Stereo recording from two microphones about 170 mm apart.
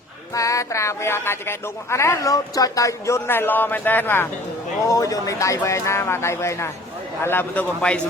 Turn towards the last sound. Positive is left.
turn(degrees=10)  # may be behind; listen again after turning